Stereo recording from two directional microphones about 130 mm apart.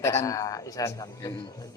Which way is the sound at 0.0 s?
20° left (ahead or behind).